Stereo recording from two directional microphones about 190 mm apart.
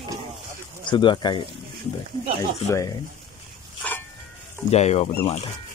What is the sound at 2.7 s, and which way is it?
Speech, 15° left (ahead or behind).